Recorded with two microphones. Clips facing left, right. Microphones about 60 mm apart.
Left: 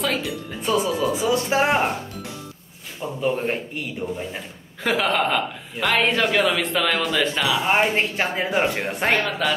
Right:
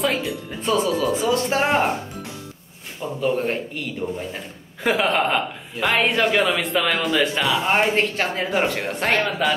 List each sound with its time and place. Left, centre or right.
0.2 s speech: centre
3.0 s a man's voice: centre
4.8 s speech: centre
9.4 s speech: centre